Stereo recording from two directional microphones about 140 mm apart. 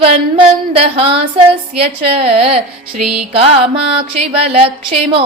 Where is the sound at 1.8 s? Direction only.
45° right (ahead or behind).